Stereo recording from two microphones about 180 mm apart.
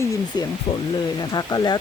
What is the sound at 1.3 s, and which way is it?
Speech, 20° left (ahead or behind).